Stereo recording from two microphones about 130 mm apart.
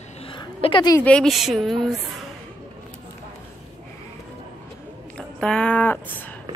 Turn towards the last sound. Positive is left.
turn(degrees=15)  # may be behind; listen again after turning